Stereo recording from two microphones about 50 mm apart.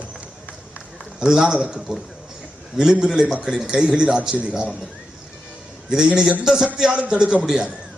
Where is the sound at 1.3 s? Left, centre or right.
Centre.